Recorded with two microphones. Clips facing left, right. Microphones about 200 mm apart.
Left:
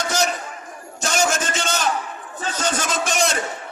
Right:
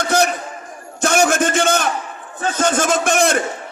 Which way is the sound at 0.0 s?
55° right (ahead or behind).